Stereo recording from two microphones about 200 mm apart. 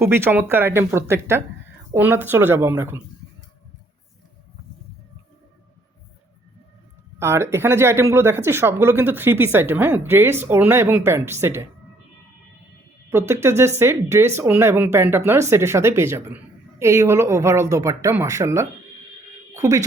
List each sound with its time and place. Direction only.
0.1 s speech: 10° right (ahead or behind)
7.2 s speech: 15° right (ahead or behind)
13.1 s speech: 15° right (ahead or behind)